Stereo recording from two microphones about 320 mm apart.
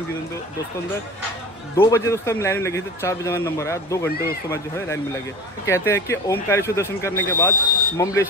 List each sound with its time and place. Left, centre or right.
1.8 s a man's voice: centre
4.1 s speech: left
4.5 s a man's voice: centre